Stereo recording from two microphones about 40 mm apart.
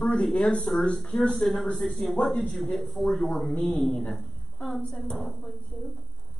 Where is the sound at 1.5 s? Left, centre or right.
Centre.